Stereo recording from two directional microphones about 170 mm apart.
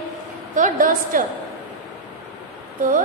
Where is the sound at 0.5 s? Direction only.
50° right (ahead or behind).